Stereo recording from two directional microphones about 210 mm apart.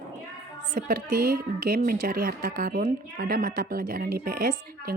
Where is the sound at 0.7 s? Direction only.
40° right (ahead or behind).